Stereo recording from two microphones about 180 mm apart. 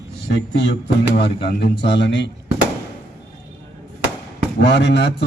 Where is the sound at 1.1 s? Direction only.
65° left (ahead or behind).